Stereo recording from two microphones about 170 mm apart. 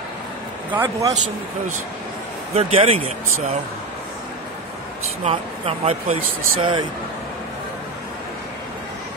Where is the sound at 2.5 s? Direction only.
35° right (ahead or behind).